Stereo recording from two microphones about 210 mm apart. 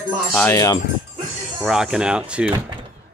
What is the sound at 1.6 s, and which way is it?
Speech, centre (ahead or behind).